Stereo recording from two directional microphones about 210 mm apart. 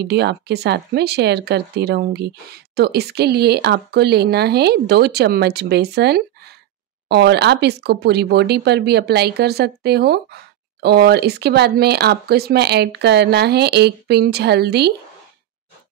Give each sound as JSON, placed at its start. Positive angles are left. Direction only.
{"t": 0.0, "sound": "speech", "side_deg": -50}